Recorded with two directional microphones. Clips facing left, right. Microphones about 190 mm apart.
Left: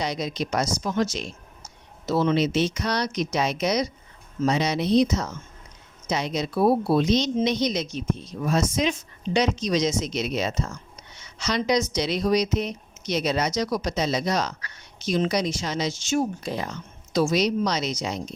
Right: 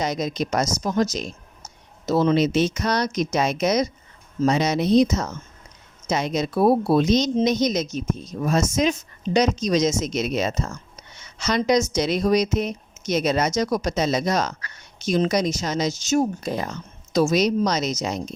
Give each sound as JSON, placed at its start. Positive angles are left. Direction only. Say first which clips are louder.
{"t": 0.0, "sound": "speech", "louder": "right 3 dB", "side_deg": -45}